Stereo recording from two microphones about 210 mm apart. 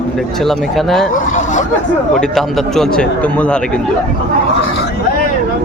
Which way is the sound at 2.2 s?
Centre (ahead or behind).